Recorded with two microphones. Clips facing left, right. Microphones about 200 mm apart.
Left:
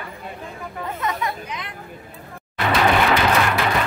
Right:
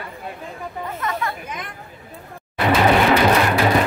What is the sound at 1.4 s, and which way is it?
Speech, 50° right (ahead or behind).